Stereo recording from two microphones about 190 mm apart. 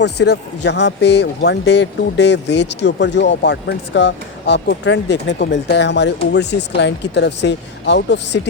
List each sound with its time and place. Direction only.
0.0 s speech: 65° left (ahead or behind)